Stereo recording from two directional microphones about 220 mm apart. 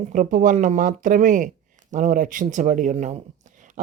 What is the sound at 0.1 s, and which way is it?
Speech, 35° right (ahead or behind).